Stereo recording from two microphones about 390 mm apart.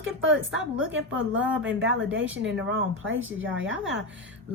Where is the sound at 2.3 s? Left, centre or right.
Right.